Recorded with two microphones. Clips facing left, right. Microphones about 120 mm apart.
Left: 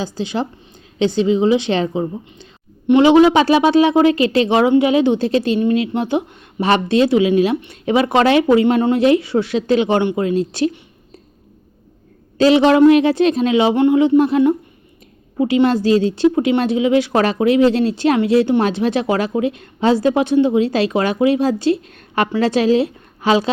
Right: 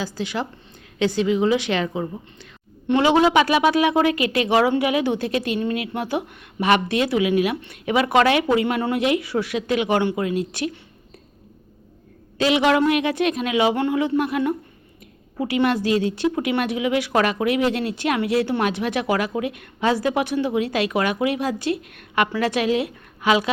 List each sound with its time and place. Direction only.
0.0 s a woman's voice: 25° left (ahead or behind)
12.4 s a woman's voice: 35° left (ahead or behind)